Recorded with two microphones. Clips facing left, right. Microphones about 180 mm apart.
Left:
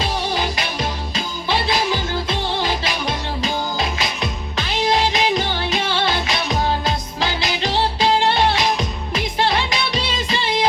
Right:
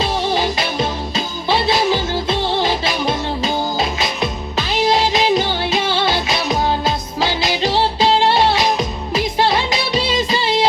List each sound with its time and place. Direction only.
0.5 s music: 25° right (ahead or behind)
7.6 s music: 25° right (ahead or behind)